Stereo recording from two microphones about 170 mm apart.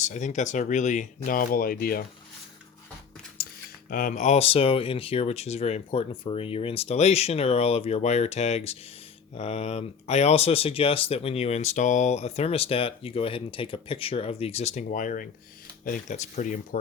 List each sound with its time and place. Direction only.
0.0 s speech: 45° left (ahead or behind)
3.4 s a sound: 60° left (ahead or behind)
3.8 s speech: 55° left (ahead or behind)